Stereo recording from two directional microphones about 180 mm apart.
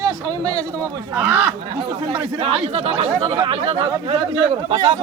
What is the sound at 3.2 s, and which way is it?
Speech, 20° right (ahead or behind).